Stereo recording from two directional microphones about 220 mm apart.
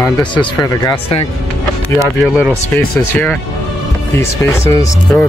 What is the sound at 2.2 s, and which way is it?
Speech, 5° right (ahead or behind).